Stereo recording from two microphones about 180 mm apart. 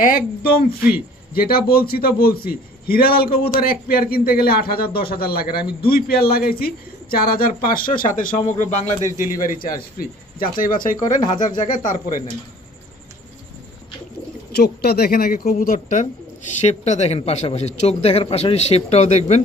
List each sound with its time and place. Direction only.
0.0 s a man's voice: 50° left (ahead or behind)
9.6 s speech: 55° left (ahead or behind)
14.5 s a man's voice: 60° left (ahead or behind); by 19.4 s 40° left (ahead or behind)